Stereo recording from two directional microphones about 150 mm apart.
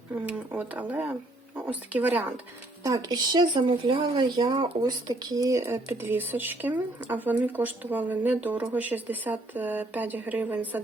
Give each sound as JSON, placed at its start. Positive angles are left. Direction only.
{"t": 0.3, "sound": "speech", "side_deg": -10}
{"t": 2.8, "sound": "speech", "side_deg": -25}